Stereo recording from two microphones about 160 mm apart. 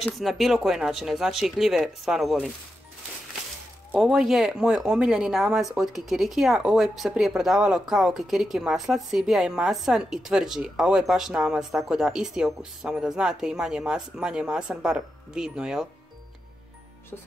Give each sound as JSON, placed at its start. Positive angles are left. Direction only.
{"t": 0.0, "sound": "speech", "side_deg": 0}
{"t": 3.9, "sound": "speech", "side_deg": 0}